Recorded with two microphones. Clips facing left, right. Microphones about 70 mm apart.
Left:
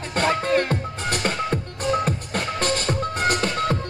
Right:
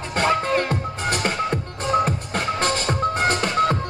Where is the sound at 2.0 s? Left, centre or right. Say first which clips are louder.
Right 2 dB; right.